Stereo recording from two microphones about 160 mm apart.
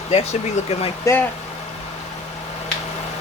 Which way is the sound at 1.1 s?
20° left (ahead or behind).